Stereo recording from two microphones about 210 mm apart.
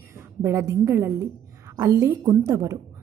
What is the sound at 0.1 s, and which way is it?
A woman's voice, 15° right (ahead or behind).